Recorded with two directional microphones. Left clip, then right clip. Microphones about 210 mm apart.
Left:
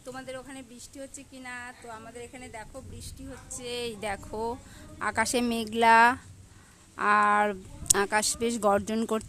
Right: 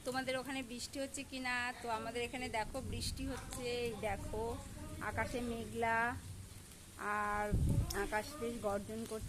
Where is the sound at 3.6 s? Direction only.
45° left (ahead or behind).